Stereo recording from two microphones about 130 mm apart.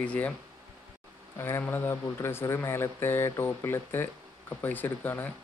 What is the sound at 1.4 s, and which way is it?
Speech, 20° left (ahead or behind).